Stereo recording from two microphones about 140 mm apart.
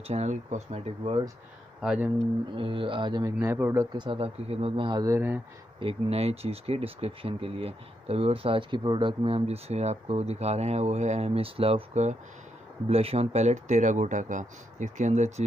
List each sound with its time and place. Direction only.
0.0 s speech: 50° right (ahead or behind)
1.8 s speech: 5° right (ahead or behind)
2.5 s a man's voice: 40° right (ahead or behind); by 3.9 s 20° right (ahead or behind)
3.9 s speech: 35° right (ahead or behind)
5.0 s speech: 20° right (ahead or behind)
5.8 s speech: 45° right (ahead or behind)